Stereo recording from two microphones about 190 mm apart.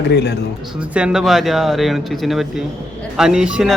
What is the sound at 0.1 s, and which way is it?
Speech, 60° left (ahead or behind).